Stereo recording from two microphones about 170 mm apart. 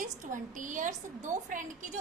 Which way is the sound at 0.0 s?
50° right (ahead or behind).